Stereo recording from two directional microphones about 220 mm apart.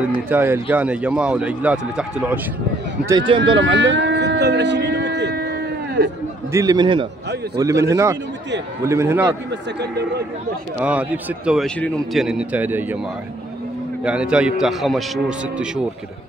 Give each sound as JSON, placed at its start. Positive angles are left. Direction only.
{"t": 0.3, "sound": "a man's voice", "side_deg": -10}
{"t": 3.1, "sound": "speech", "side_deg": -20}
{"t": 3.7, "sound": "speech", "side_deg": -55}
{"t": 6.5, "sound": "a man's voice", "side_deg": -15}
{"t": 9.5, "sound": "a man's voice", "side_deg": -50}
{"t": 10.8, "sound": "a man's voice", "side_deg": -5}
{"t": 14.0, "sound": "a man's voice", "side_deg": -5}